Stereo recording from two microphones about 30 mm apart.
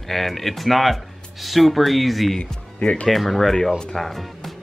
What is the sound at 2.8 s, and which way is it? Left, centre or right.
Speech, left.